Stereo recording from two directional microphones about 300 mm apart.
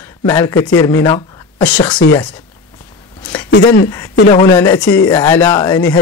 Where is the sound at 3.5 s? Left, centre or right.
Left.